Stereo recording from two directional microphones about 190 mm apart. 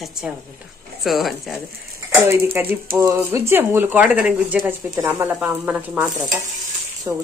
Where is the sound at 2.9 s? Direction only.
15° right (ahead or behind).